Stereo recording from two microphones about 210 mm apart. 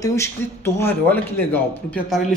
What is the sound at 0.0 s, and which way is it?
Speech, 15° left (ahead or behind).